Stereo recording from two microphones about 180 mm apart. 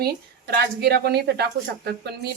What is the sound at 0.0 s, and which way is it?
A woman's voice, 65° right (ahead or behind).